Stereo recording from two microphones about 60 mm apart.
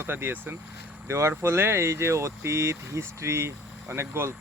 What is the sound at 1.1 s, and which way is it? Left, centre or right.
Speech, right.